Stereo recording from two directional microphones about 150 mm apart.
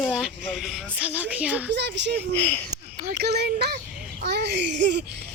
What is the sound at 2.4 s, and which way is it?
Speech, 15° left (ahead or behind).